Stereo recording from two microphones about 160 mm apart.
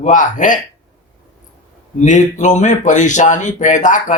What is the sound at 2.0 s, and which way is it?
A man's voice, 50° left (ahead or behind).